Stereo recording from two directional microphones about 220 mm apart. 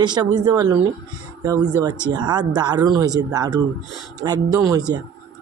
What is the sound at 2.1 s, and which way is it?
Speech, 20° right (ahead or behind).